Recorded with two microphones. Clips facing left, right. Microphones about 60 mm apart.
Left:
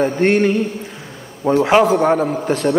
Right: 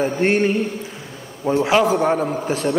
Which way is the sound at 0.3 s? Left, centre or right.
Left.